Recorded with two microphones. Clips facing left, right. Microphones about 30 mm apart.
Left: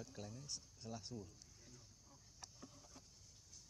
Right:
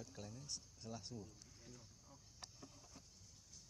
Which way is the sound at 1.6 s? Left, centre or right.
Centre.